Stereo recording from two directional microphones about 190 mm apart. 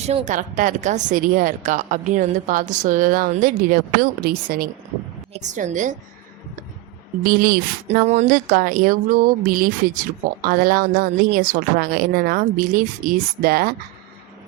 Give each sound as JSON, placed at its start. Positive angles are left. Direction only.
{"t": 0.0, "sound": "speech", "side_deg": -35}
{"t": 5.4, "sound": "a woman's voice", "side_deg": -40}
{"t": 7.3, "sound": "speech", "side_deg": -50}
{"t": 7.9, "sound": "speech", "side_deg": -35}